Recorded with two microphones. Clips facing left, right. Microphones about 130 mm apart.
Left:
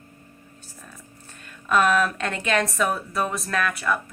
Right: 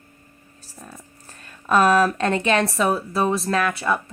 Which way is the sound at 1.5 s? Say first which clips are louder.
Right 3 dB; 35° right (ahead or behind).